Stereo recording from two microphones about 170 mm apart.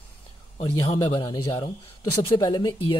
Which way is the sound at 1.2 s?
20° left (ahead or behind).